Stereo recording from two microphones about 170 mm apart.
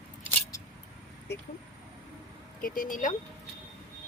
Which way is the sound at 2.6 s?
55° left (ahead or behind).